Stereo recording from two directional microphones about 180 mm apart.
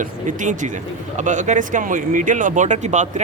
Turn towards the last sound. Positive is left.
turn(degrees=-40)  # may be behind; listen again after turning